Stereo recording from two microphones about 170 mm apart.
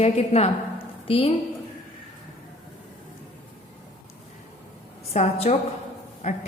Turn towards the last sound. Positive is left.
turn(degrees=40)  # may be behind; listen again after turning